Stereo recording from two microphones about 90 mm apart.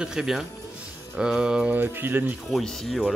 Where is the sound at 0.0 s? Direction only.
5° right (ahead or behind).